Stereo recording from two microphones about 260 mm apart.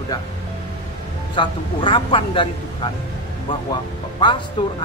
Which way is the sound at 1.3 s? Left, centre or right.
Centre.